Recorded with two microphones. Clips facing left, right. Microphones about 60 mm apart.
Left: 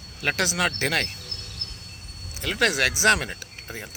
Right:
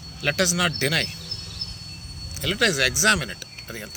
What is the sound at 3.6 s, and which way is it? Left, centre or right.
Speech, centre.